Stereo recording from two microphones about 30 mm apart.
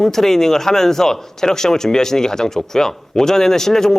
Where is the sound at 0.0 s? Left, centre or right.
Centre.